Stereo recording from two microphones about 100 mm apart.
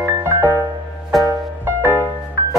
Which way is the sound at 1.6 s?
25° right (ahead or behind).